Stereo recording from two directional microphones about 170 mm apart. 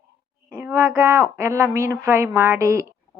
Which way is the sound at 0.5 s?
10° right (ahead or behind).